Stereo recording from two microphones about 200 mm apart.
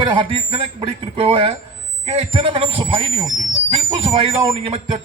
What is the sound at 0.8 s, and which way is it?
Speech, 25° right (ahead or behind).